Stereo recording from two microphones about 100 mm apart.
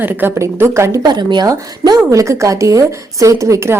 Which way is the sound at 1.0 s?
45° right (ahead or behind).